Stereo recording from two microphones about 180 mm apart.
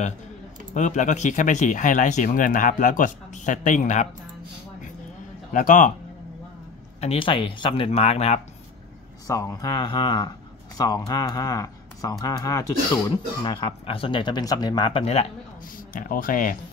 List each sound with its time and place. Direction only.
0.7 s speech: 45° left (ahead or behind)
5.5 s speech: 45° left (ahead or behind)
7.0 s speech: 30° left (ahead or behind)
9.3 s speech: 20° left (ahead or behind)
15.9 s speech: 50° left (ahead or behind)